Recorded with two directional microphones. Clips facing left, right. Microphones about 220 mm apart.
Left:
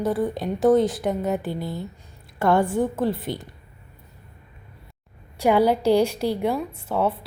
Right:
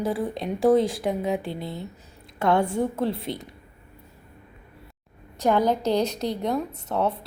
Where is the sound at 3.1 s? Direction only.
25° right (ahead or behind).